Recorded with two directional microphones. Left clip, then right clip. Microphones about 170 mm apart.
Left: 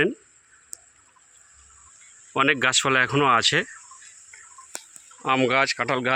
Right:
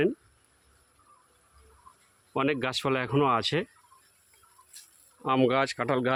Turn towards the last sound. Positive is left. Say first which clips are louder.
# left 5 dB
turn(degrees=-20)  # may be behind; listen again after turning